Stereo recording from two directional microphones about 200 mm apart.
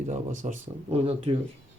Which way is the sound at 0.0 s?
40° right (ahead or behind).